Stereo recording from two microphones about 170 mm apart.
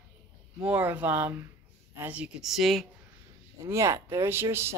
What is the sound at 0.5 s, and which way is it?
Speech, 10° right (ahead or behind).